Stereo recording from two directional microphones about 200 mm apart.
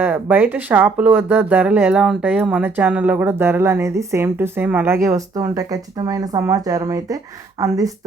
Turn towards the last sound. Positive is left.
turn(degrees=-15)  # may be behind; listen again after turning